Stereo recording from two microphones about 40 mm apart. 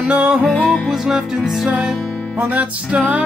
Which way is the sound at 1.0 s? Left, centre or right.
Centre.